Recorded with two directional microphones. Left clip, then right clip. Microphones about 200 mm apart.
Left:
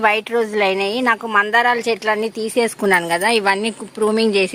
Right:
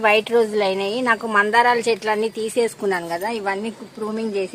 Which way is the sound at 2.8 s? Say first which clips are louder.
Left 7 dB; 30° left (ahead or behind).